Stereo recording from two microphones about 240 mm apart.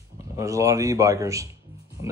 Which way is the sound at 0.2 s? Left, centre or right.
Centre.